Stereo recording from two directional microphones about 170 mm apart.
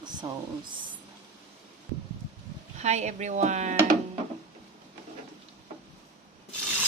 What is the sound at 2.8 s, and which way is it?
Speech, 40° right (ahead or behind).